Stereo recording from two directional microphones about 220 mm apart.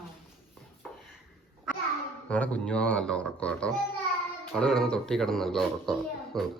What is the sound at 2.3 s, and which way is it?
Speech, 5° left (ahead or behind).